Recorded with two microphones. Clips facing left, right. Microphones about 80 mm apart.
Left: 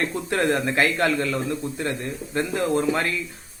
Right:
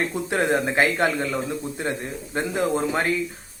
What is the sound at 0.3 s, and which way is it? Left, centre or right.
Speech, centre.